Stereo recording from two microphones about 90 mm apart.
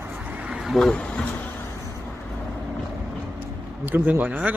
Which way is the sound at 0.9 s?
10° left (ahead or behind).